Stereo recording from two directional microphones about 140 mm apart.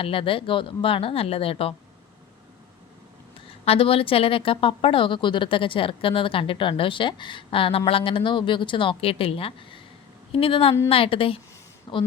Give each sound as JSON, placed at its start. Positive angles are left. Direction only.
{"t": 0.0, "sound": "speech", "side_deg": 40}
{"t": 3.7, "sound": "speech", "side_deg": 40}